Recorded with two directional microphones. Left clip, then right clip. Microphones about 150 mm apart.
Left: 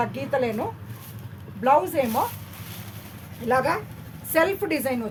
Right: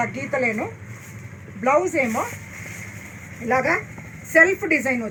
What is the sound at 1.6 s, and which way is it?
Speech, 35° left (ahead or behind).